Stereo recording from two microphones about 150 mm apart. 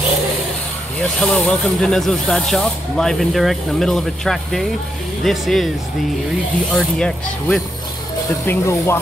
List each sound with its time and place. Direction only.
1.2 s speech: 5° left (ahead or behind)
6.7 s speech: centre (ahead or behind)
8.5 s speech: 15° left (ahead or behind)